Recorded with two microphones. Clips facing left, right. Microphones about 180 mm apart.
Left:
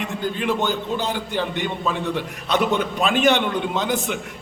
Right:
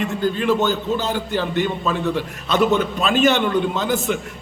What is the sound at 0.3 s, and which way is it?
A man's voice, 15° left (ahead or behind).